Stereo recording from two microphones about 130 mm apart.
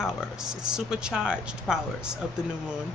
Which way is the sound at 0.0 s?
5° right (ahead or behind).